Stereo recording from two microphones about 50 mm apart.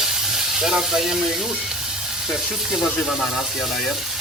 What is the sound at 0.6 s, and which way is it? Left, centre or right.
Speech, centre.